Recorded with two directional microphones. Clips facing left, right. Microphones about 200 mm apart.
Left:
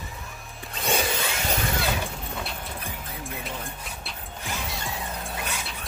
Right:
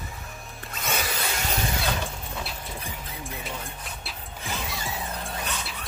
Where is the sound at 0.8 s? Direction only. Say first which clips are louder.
Left 4 dB; 30° left (ahead or behind).